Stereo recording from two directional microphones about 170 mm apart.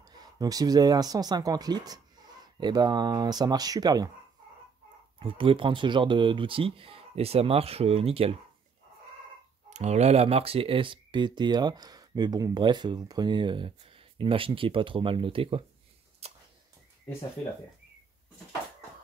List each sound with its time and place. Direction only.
0.0 s speech: 25° right (ahead or behind)
5.2 s speech: 30° right (ahead or behind)
9.7 s speech: 40° right (ahead or behind)
16.2 s a sound: 35° right (ahead or behind)